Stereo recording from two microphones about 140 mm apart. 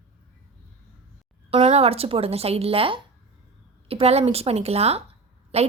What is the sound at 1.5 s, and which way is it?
A woman's voice, 40° right (ahead or behind).